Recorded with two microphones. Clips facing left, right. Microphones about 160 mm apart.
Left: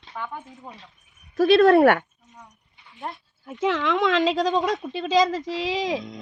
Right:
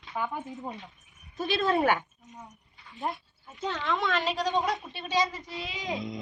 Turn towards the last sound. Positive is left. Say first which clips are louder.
# left 10 dB
turn(degrees=90)